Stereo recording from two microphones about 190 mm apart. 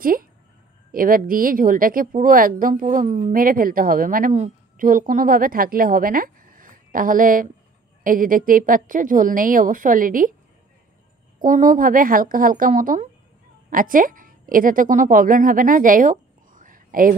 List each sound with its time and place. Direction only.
0.0 s speech: 50° right (ahead or behind)
11.4 s a woman's voice: 45° right (ahead or behind)